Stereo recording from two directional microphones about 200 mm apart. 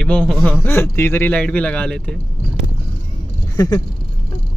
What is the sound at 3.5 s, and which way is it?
Speech, 20° left (ahead or behind).